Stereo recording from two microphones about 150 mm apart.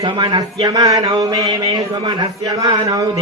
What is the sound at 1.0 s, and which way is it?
A man's voice, 30° right (ahead or behind).